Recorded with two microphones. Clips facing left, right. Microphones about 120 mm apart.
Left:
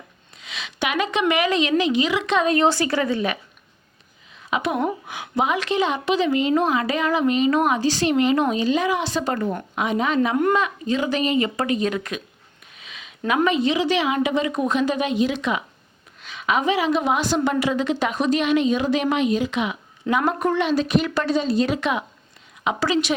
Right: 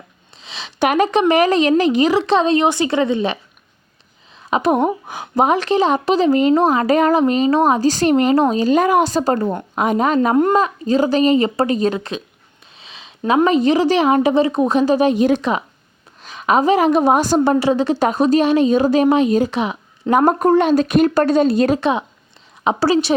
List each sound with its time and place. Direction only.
0.3 s a sound: 30° right (ahead or behind)
1.2 s a woman's voice: 40° right (ahead or behind)
4.4 s a woman's voice: 40° right (ahead or behind); by 21.8 s 55° right (ahead or behind)
21.8 s a woman's voice: 30° right (ahead or behind)